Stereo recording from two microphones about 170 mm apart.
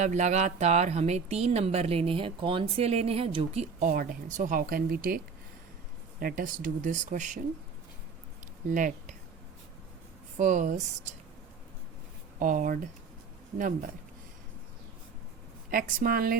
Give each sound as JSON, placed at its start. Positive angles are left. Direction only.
{"t": 0.0, "sound": "speech", "side_deg": -45}
{"t": 8.7, "sound": "speech", "side_deg": -50}
{"t": 10.3, "sound": "speech", "side_deg": -50}
{"t": 12.4, "sound": "speech", "side_deg": -55}
{"t": 15.7, "sound": "a woman's voice", "side_deg": -60}